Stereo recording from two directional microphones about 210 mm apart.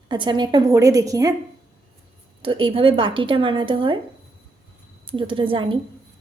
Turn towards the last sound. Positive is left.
turn(degrees=-25)  # may be behind; listen again after turning